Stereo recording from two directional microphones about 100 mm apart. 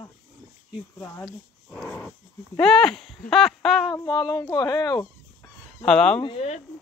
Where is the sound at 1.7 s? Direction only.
10° left (ahead or behind).